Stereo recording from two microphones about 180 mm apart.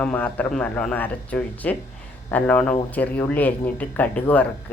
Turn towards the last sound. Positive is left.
turn(degrees=10)  # may be behind; listen again after turning